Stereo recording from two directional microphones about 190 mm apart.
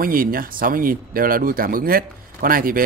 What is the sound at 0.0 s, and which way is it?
Speech, 50° right (ahead or behind).